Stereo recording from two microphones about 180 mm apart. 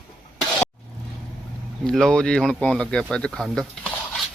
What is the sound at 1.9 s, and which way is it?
Speech, 5° left (ahead or behind).